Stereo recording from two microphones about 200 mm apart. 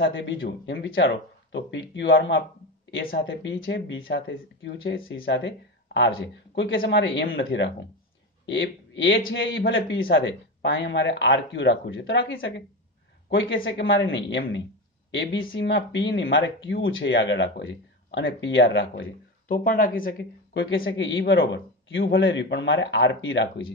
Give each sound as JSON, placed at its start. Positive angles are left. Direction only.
{"t": 0.0, "sound": "speech", "side_deg": 70}
{"t": 19.4, "sound": "speech", "side_deg": 45}
{"t": 20.5, "sound": "speech", "side_deg": 75}